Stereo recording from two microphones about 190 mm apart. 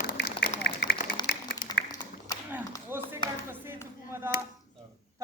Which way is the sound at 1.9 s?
20° left (ahead or behind).